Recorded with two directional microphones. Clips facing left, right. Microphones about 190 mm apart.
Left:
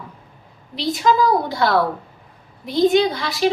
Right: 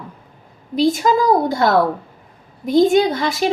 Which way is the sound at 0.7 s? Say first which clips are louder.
Right 3 dB; 45° right (ahead or behind).